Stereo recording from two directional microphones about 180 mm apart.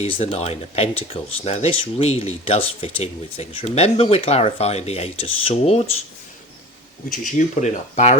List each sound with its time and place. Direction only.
0.0 s speech: 35° left (ahead or behind)
7.1 s speech: 45° left (ahead or behind)